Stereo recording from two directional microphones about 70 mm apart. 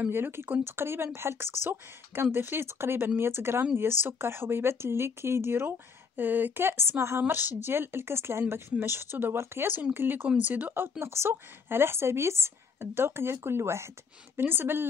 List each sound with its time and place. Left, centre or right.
0.1 s speech: right